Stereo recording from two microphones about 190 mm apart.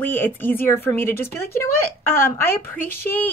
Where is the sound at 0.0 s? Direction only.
10° left (ahead or behind).